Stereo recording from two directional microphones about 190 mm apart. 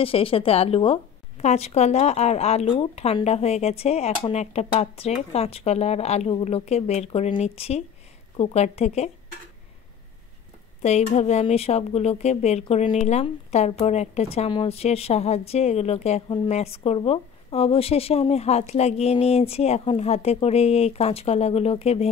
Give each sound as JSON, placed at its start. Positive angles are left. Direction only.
{"t": 0.0, "sound": "a woman's voice", "side_deg": 30}
{"t": 10.8, "sound": "speech", "side_deg": 35}